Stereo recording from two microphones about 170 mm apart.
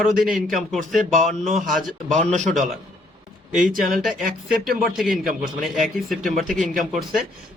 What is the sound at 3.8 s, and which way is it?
Speech, 55° right (ahead or behind).